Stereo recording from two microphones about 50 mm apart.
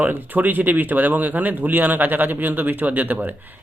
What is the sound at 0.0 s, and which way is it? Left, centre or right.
Speech, right.